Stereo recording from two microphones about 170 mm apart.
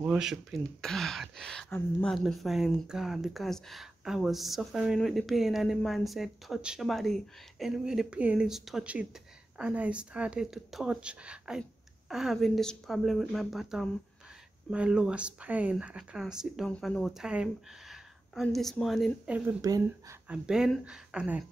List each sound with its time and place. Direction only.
0.0 s speech: 5° right (ahead or behind)
19.6 s speech: 20° right (ahead or behind)
20.2 s speech: 5° right (ahead or behind)